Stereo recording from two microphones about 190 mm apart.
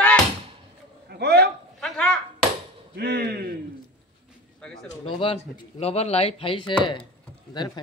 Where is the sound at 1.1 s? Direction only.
60° right (ahead or behind).